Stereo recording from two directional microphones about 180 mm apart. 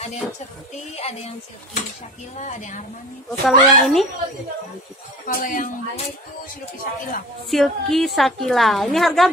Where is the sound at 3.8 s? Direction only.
Centre (ahead or behind).